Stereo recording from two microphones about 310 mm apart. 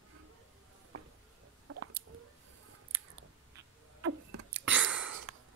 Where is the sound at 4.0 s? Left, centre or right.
Right.